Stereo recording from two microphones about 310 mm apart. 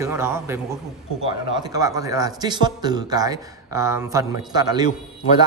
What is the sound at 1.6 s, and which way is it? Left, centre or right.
A man's voice, centre.